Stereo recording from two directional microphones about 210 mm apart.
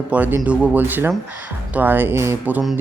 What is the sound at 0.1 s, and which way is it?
Speech, 10° right (ahead or behind).